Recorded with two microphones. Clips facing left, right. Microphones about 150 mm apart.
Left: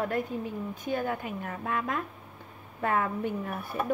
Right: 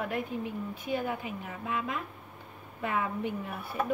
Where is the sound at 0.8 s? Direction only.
50° left (ahead or behind).